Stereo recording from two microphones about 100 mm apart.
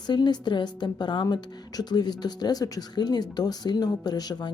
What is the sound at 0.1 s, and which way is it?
Speech, 45° left (ahead or behind).